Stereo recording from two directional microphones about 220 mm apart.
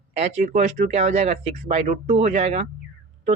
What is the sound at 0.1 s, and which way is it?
Speech, 30° right (ahead or behind).